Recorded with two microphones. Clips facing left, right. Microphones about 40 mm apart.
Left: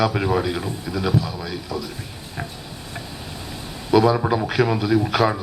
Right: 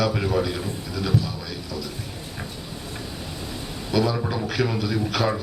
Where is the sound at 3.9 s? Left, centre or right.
Centre.